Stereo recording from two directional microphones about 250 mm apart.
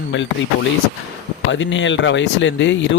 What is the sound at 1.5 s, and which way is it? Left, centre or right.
Speech, left.